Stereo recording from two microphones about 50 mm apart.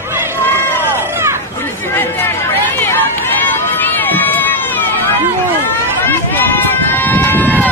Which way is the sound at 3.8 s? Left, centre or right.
Left.